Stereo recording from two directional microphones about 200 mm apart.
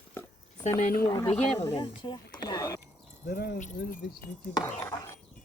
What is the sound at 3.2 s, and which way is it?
Speech, 50° left (ahead or behind).